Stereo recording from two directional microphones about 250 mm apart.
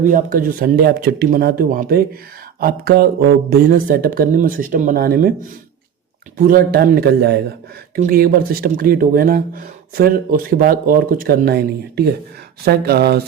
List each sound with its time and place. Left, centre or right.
0.0 s speech: right
6.4 s speech: right